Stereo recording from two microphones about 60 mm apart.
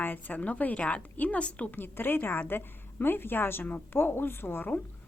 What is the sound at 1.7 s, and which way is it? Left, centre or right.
A woman's voice, left.